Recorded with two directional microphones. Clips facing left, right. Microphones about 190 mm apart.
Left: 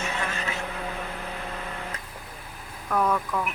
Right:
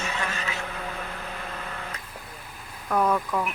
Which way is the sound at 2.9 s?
10° right (ahead or behind).